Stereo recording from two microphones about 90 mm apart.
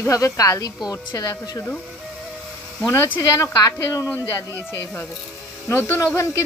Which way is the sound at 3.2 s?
35° left (ahead or behind).